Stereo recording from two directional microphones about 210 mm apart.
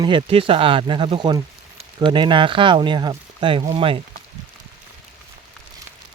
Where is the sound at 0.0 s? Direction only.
20° right (ahead or behind).